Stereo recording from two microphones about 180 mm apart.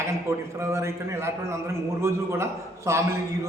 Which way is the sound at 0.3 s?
15° right (ahead or behind).